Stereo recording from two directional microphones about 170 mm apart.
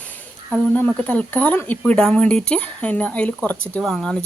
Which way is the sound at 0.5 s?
5° left (ahead or behind).